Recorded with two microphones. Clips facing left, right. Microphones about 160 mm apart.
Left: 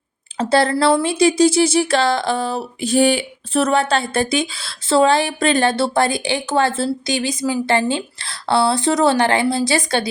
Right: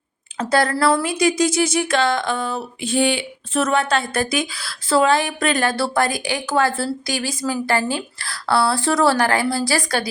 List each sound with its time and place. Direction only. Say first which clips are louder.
0.3 s speech: left 3 dB; 30° left (ahead or behind)